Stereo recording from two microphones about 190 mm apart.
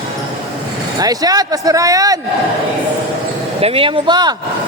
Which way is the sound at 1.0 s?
20° right (ahead or behind).